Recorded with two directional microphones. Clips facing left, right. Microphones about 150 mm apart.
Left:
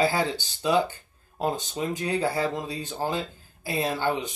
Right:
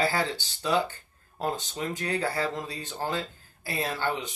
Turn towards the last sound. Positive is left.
turn(degrees=15)  # may be behind; listen again after turning